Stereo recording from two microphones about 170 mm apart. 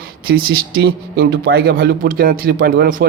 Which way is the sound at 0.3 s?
60° right (ahead or behind).